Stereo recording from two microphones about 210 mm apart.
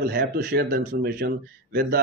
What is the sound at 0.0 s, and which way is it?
Speech, 50° right (ahead or behind).